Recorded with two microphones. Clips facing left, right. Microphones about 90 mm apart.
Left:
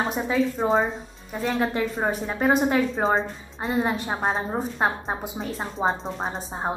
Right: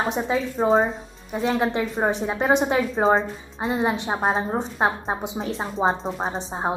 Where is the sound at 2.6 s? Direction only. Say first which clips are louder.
Right 1 dB; 5° right (ahead or behind).